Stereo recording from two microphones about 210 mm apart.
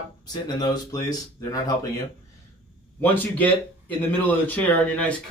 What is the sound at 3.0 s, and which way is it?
Speech, 10° left (ahead or behind).